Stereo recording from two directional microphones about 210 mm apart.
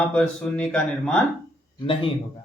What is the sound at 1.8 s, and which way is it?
Speech, 25° left (ahead or behind).